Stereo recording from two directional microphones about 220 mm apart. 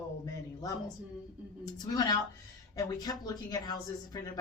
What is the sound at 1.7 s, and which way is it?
Speech, 15° left (ahead or behind).